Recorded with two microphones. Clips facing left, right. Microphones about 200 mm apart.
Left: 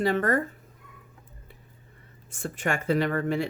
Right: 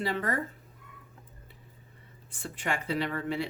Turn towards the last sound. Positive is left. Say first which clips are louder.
# left 5 dB
turn(degrees=45)  # may be behind; listen again after turning